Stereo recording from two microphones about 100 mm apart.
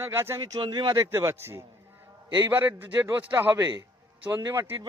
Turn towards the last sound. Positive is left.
turn(degrees=-30)  # may be behind; listen again after turning